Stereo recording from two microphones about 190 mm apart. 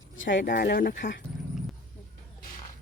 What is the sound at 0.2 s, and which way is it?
Speech, 75° left (ahead or behind).